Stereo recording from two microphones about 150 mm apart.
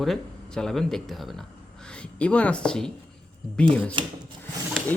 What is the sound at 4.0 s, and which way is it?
Speech, 35° right (ahead or behind).